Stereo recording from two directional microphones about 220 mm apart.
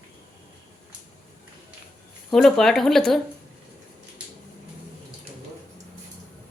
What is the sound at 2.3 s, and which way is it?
Speech, centre (ahead or behind).